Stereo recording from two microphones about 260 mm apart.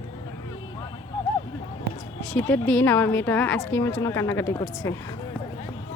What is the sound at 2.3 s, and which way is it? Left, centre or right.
Speech, centre.